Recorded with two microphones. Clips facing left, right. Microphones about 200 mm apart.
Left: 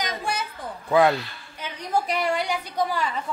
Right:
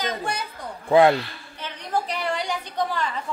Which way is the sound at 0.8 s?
25° right (ahead or behind).